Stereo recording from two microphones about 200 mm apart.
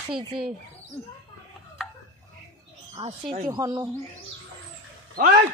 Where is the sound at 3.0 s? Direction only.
25° right (ahead or behind).